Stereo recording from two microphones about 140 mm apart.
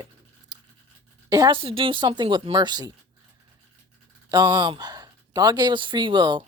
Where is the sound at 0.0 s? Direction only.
30° right (ahead or behind).